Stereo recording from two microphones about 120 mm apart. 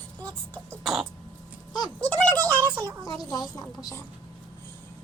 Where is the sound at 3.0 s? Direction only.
35° left (ahead or behind).